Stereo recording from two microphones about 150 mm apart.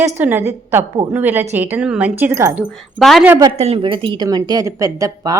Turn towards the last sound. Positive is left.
turn(degrees=-25)  # may be behind; listen again after turning